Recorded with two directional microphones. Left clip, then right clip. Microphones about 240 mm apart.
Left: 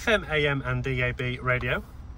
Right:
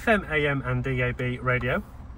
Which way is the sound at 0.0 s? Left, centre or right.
Centre.